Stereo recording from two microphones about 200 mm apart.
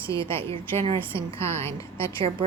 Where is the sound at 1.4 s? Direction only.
10° left (ahead or behind).